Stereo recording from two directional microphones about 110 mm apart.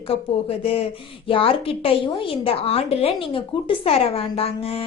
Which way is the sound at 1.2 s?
55° left (ahead or behind).